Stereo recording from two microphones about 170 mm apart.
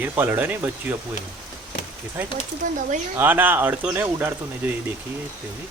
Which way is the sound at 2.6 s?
50° right (ahead or behind).